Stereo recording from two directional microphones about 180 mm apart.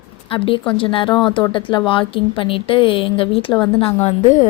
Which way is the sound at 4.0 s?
40° left (ahead or behind).